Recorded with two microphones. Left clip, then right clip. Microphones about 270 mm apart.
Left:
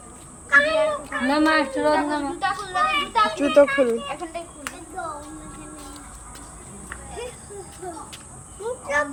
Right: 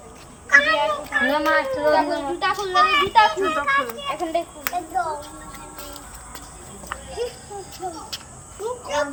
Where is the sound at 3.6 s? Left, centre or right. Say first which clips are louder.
Left 12 dB; left.